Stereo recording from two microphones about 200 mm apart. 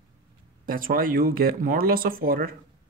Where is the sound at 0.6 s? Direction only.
45° right (ahead or behind).